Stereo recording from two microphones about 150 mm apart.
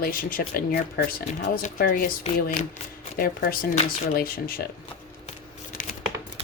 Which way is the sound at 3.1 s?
75° left (ahead or behind).